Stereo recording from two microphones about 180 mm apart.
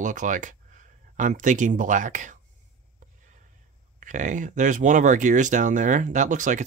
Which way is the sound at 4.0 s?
45° right (ahead or behind).